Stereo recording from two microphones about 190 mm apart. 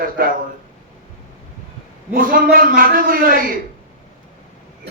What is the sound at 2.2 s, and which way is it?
A man's voice, 50° right (ahead or behind).